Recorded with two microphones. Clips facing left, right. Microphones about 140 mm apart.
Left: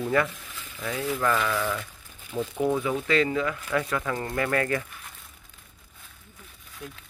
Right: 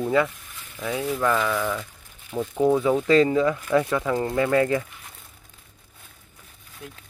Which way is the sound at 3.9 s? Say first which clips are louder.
Right 5 dB; 15° right (ahead or behind).